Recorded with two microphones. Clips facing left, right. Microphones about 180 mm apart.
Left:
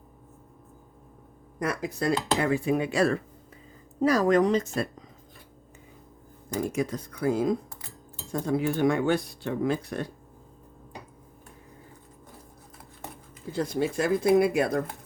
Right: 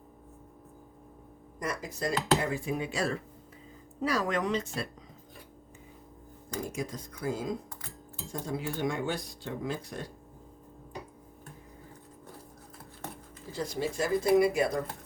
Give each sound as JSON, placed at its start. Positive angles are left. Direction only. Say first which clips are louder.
{"t": 1.5, "sound": "speech", "louder": "left 6 dB", "side_deg": 60}
{"t": 4.0, "sound": "speech", "louder": "left 8 dB", "side_deg": 40}
{"t": 6.7, "sound": "speech", "louder": "left 7 dB", "side_deg": 65}
{"t": 13.5, "sound": "speech", "louder": "left 6 dB", "side_deg": 55}